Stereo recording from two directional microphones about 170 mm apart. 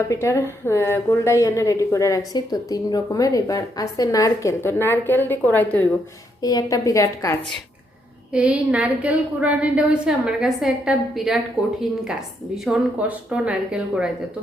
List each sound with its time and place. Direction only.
0.1 s a woman's voice: 15° left (ahead or behind)
6.4 s a woman's voice: 20° left (ahead or behind)
8.3 s a woman's voice: 5° right (ahead or behind)